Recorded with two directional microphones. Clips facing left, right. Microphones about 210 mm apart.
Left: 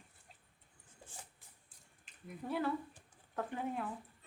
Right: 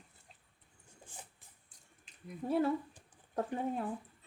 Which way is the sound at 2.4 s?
30° right (ahead or behind).